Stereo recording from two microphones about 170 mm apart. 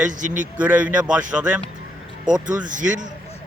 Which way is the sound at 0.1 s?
50° right (ahead or behind).